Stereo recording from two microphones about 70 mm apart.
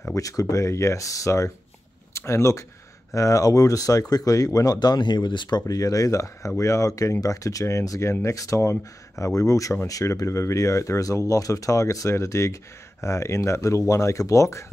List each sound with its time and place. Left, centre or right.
0.1 s speech: left
5.7 s speech: left